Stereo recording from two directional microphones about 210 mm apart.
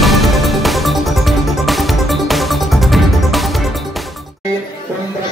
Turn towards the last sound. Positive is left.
turn(degrees=0)  # may be behind; listen again after turning